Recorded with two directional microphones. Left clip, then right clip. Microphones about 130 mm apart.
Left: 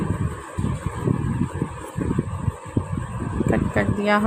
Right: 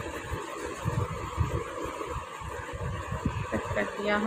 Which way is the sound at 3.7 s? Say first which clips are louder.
Left 7 dB; 65° left (ahead or behind).